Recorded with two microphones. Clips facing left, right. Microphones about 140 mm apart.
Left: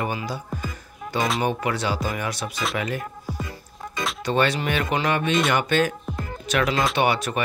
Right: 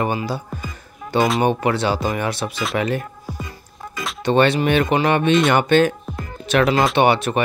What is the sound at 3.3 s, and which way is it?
Music, centre (ahead or behind).